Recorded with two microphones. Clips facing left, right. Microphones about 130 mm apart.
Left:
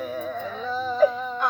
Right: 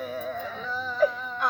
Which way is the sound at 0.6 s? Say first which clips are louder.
Left 4 dB; 20° left (ahead or behind).